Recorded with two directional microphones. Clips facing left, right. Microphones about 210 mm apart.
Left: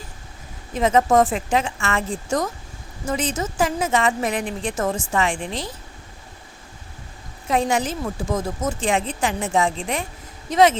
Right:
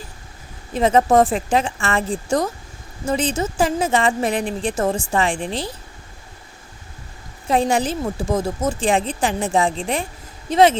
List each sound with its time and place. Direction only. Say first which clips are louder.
0.7 s a woman's voice: right 2 dB; 30° right (ahead or behind)
7.4 s a woman's voice: right 3 dB; 30° right (ahead or behind)